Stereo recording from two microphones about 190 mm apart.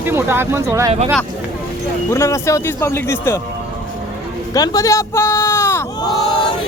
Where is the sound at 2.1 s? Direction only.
15° left (ahead or behind).